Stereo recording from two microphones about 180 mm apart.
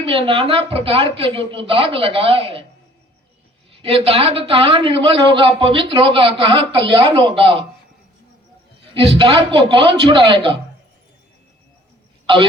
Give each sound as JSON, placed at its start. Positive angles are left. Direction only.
{"t": 0.0, "sound": "speech", "side_deg": -30}
{"t": 3.7, "sound": "a man's voice", "side_deg": -30}
{"t": 9.0, "sound": "a man's voice", "side_deg": -30}
{"t": 12.2, "sound": "speech", "side_deg": -25}